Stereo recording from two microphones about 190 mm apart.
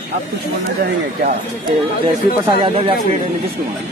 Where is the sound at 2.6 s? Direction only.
25° right (ahead or behind).